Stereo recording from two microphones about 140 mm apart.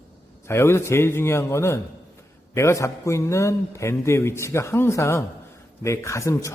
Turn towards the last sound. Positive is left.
turn(degrees=20)  # may be behind; listen again after turning